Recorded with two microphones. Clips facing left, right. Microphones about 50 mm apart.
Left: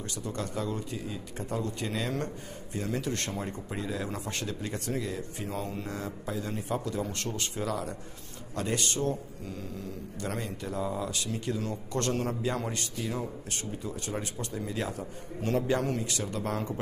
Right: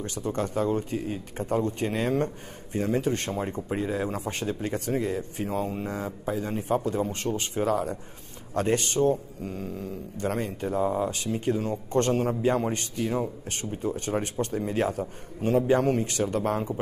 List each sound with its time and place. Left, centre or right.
0.0 s speech: right
1.4 s speech: right
7.2 s speech: right
7.5 s speech: right